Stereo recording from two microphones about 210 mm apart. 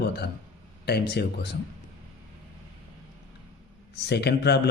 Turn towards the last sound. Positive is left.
turn(degrees=55)  # may be behind; listen again after turning